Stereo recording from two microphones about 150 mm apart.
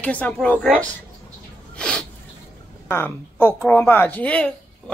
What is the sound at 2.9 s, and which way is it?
A woman's voice, 15° left (ahead or behind).